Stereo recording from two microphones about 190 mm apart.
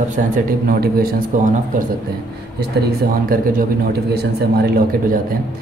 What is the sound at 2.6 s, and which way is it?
A man's voice, 55° right (ahead or behind).